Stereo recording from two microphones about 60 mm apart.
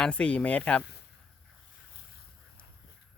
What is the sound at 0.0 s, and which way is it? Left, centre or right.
Speech, centre.